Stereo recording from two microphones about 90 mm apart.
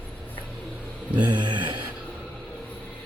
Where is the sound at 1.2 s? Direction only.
60° right (ahead or behind).